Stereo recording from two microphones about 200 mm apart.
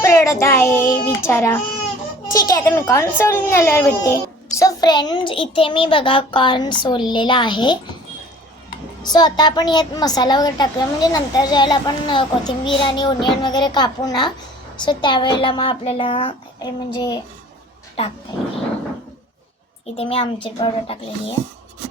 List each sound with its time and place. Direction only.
0.0 s a child's voice: 15° left (ahead or behind)
9.0 s a woman's voice: 20° left (ahead or behind)
20.0 s a woman's voice: 30° left (ahead or behind)